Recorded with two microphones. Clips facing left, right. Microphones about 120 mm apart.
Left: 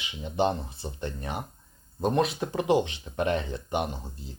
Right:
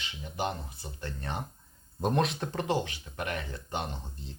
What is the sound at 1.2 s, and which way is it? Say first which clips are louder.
Speech: left 2 dB; 10° left (ahead or behind).